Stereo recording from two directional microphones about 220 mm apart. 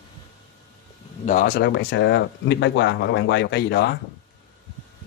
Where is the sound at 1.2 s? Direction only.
40° left (ahead or behind).